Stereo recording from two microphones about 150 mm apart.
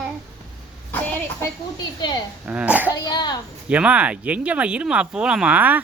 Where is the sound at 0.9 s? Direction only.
10° left (ahead or behind).